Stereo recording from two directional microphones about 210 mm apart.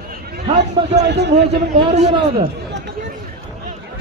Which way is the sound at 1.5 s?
30° right (ahead or behind).